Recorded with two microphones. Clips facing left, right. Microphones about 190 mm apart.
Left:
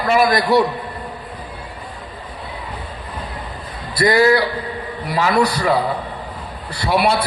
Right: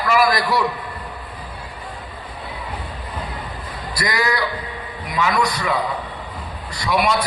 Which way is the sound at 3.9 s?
30° left (ahead or behind).